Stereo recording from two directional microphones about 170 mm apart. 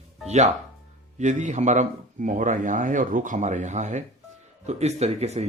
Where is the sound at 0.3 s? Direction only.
40° right (ahead or behind).